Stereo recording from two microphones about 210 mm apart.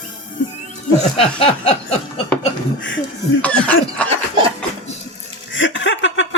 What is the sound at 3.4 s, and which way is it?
Speech, 5° left (ahead or behind).